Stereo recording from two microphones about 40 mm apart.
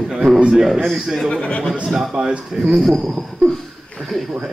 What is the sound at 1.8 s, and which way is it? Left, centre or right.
A man's voice, centre.